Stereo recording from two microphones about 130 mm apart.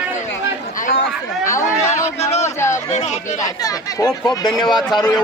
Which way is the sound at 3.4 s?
30° left (ahead or behind).